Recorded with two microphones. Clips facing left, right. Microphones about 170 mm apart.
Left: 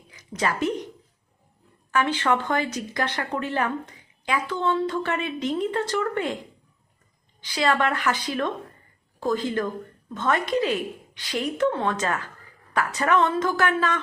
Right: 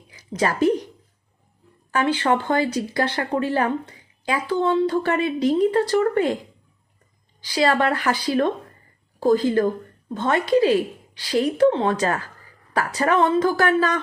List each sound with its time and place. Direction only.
0.2 s a sound: 35° right (ahead or behind)
1.9 s speech: 30° right (ahead or behind)
7.4 s speech: 35° right (ahead or behind)